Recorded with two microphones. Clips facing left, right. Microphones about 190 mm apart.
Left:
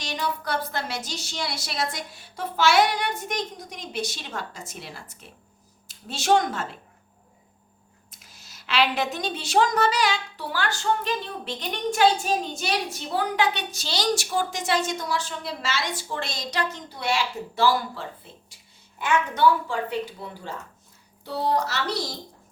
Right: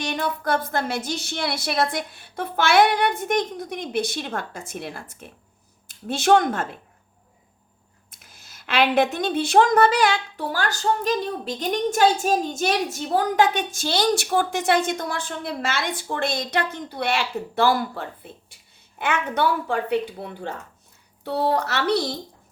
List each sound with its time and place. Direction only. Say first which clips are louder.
0.0 s a woman's voice: right 4 dB; 55° right (ahead or behind)
8.1 s a woman's voice: right 1 dB; 55° right (ahead or behind)